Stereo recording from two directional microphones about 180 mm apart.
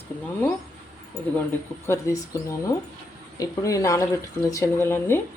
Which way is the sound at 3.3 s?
20° left (ahead or behind).